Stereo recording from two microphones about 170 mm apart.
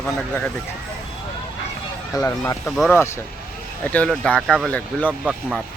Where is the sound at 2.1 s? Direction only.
15° left (ahead or behind).